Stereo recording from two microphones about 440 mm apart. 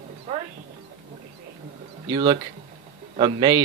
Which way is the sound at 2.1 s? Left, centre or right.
Centre.